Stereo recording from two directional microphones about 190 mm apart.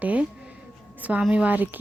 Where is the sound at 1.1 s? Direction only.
5° right (ahead or behind).